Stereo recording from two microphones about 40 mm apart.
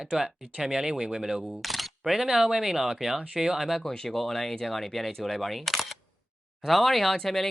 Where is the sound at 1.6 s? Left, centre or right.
Centre.